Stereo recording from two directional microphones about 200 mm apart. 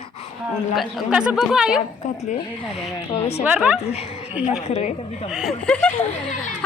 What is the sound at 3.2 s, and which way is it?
Speech, 30° left (ahead or behind).